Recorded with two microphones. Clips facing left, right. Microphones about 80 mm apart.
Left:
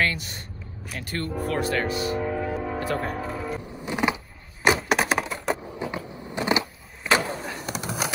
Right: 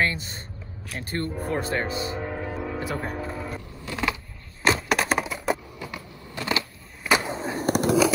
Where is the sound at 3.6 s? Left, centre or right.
Centre.